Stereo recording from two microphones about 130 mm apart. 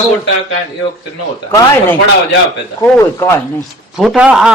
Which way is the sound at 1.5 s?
20° left (ahead or behind).